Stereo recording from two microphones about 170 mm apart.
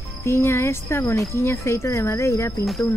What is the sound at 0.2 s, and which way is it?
Speech, 15° left (ahead or behind).